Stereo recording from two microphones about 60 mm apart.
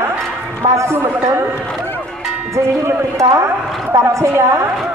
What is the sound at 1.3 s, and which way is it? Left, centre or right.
Speech, right.